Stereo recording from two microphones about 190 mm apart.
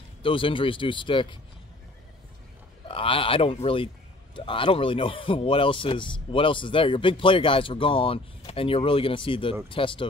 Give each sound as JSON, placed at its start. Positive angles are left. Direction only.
{"t": 0.2, "sound": "a man's voice", "side_deg": 30}
{"t": 2.9, "sound": "a man's voice", "side_deg": 30}